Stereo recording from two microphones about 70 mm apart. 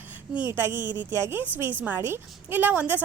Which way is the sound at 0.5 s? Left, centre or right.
Right.